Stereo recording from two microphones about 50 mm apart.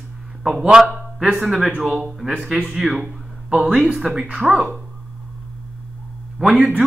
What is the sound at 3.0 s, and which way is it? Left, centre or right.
Speech, right.